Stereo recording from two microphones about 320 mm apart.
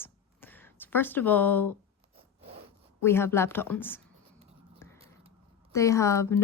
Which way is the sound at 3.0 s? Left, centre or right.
Centre.